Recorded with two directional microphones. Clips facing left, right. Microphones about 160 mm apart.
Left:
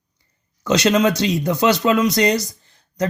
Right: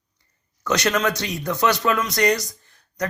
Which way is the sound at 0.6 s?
20° left (ahead or behind).